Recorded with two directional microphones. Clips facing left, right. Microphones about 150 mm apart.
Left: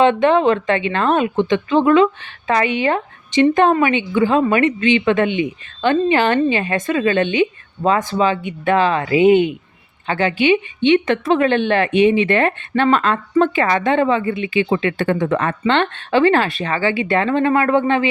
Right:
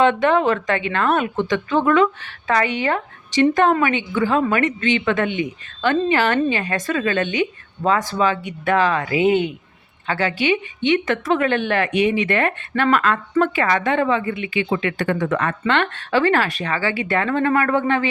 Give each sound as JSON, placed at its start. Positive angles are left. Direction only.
{"t": 0.0, "sound": "a woman's voice", "side_deg": 25}